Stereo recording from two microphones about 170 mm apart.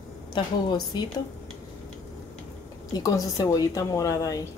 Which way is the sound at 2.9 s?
20° left (ahead or behind).